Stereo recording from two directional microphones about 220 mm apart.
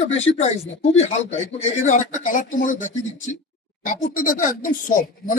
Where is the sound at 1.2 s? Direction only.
55° left (ahead or behind).